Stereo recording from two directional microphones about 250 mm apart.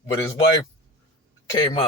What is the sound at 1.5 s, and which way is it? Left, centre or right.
Speech, centre.